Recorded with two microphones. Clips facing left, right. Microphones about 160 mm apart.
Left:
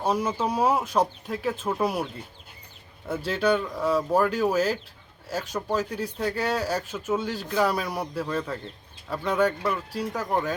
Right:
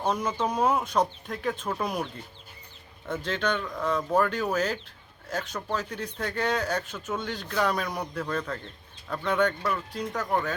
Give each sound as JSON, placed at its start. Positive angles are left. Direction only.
{"t": 0.0, "sound": "speech", "side_deg": 10}
{"t": 3.1, "sound": "speech", "side_deg": 10}